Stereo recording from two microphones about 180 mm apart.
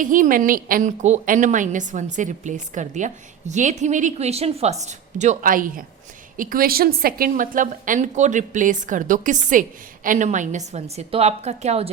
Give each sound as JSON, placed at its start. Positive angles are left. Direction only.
{"t": 0.0, "sound": "a woman's voice", "side_deg": -50}